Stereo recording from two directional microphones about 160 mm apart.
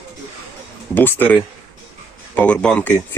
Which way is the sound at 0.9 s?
10° left (ahead or behind).